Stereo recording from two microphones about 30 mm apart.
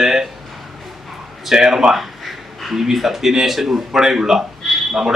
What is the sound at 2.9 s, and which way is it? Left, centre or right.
Speech, centre.